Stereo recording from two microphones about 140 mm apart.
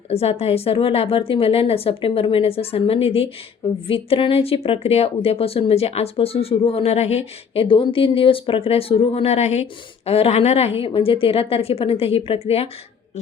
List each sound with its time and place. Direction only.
0.1 s a woman's voice: 45° left (ahead or behind)